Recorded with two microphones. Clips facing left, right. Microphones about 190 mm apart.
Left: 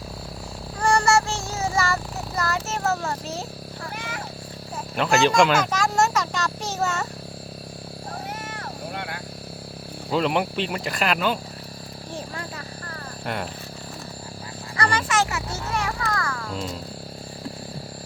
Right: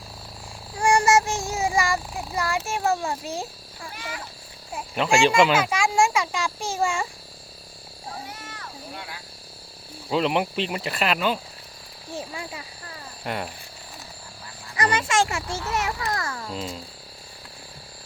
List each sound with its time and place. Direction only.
0.8 s child singing: 15° right (ahead or behind)
5.0 s a child's voice: 10° right (ahead or behind)
8.3 s a sound: 55° left (ahead or behind)
10.1 s a child's voice: centre (ahead or behind)
14.8 s a child's voice: 20° right (ahead or behind)
16.5 s a child's voice: 5° right (ahead or behind)